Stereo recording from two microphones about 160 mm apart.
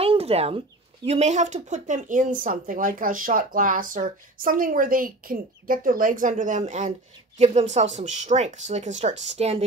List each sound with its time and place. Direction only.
0.0 s chicken: 40° right (ahead or behind)
1.0 s speech: 45° right (ahead or behind)